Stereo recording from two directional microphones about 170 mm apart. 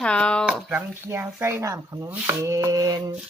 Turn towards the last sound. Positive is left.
turn(degrees=-20)  # may be behind; listen again after turning